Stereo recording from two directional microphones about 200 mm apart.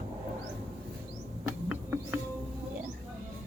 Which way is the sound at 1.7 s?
10° right (ahead or behind).